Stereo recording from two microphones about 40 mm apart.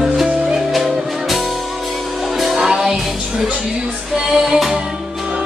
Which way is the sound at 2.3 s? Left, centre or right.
Centre.